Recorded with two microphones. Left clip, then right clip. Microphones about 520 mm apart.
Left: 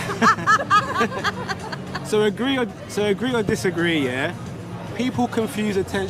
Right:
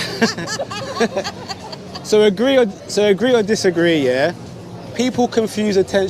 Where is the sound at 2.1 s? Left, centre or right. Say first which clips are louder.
Right 7 dB; centre.